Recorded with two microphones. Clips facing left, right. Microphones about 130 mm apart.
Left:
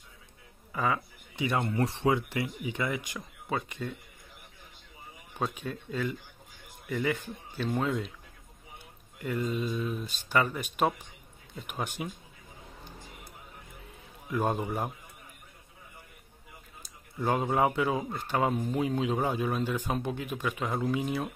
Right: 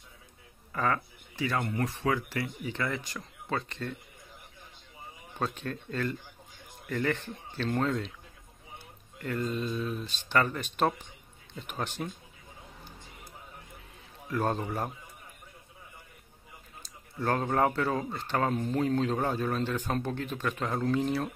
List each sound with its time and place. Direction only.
0.7 s speech: 10° left (ahead or behind)
1.3 s speech: 20° left (ahead or behind)
5.4 s speech: 10° left (ahead or behind)
9.2 s speech: 10° left (ahead or behind)
14.3 s speech: 15° left (ahead or behind)
17.2 s speech: 10° left (ahead or behind)